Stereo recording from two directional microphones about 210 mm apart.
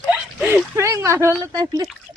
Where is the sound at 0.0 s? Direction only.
10° right (ahead or behind).